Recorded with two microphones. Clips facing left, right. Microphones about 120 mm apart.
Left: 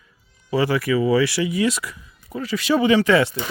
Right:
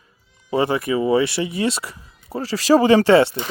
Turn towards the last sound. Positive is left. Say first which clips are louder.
# right 4 dB
turn(degrees=-30)  # may be behind; listen again after turning